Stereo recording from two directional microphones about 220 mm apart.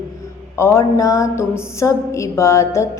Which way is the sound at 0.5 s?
10° left (ahead or behind).